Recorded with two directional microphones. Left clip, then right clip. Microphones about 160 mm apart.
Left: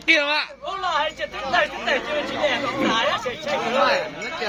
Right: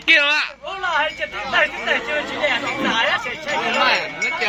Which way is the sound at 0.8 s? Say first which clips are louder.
Right 3 dB; 55° left (ahead or behind).